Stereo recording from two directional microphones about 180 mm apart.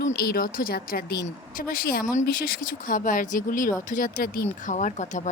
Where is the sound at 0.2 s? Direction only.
55° left (ahead or behind).